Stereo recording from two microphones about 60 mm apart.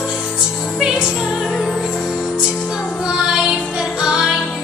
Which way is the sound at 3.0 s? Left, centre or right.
Centre.